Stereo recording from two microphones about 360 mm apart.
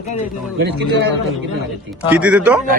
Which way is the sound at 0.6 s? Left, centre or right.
Right.